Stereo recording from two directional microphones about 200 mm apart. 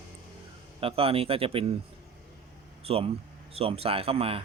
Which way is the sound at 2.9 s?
30° right (ahead or behind).